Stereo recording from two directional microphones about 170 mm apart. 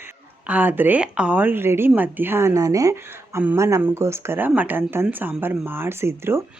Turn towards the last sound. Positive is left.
turn(degrees=-15)  # may be behind; listen again after turning